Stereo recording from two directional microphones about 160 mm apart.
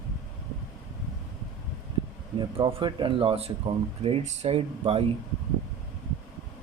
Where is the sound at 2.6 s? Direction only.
30° right (ahead or behind).